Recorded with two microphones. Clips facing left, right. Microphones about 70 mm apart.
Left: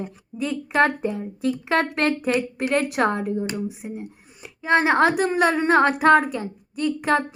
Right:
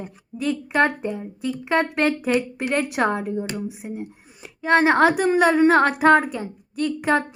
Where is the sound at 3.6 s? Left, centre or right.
Centre.